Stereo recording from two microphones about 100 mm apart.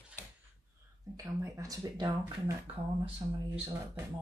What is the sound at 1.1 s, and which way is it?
Speech, 35° right (ahead or behind).